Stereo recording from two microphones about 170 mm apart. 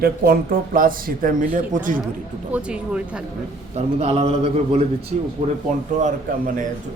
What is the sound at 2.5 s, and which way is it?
Speech, 5° right (ahead or behind).